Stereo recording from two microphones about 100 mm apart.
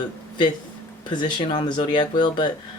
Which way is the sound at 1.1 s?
50° left (ahead or behind).